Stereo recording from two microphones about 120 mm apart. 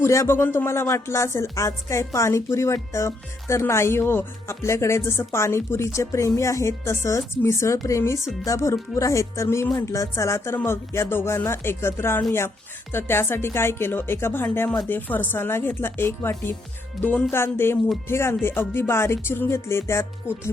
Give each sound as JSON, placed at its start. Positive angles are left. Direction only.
{"t": 0.0, "sound": "music", "side_deg": 20}
{"t": 17.0, "sound": "speech", "side_deg": 15}
{"t": 17.3, "sound": "music", "side_deg": 20}